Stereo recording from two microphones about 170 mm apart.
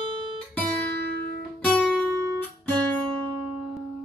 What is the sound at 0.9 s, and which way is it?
Music, 70° right (ahead or behind).